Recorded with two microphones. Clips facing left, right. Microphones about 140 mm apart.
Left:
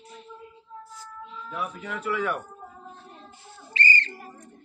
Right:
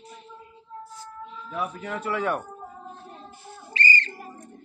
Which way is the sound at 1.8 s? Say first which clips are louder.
Even; 35° right (ahead or behind).